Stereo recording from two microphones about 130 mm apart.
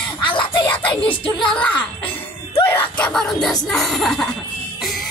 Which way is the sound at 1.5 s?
10° left (ahead or behind).